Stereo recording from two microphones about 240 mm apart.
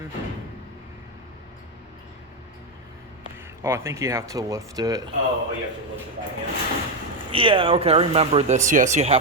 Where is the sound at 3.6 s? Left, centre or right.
Centre.